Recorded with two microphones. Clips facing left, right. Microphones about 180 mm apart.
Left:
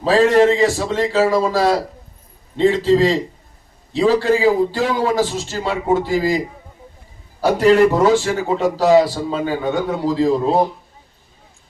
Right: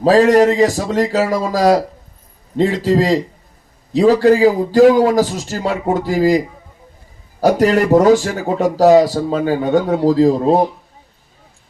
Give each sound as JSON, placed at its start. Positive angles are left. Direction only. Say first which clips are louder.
{"t": 0.0, "sound": "a man's voice", "louder": "right 3 dB", "side_deg": -40}
{"t": 7.4, "sound": "a man's voice", "louder": "even", "side_deg": -40}